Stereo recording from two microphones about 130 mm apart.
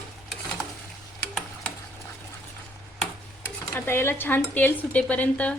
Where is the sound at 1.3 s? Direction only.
5° left (ahead or behind).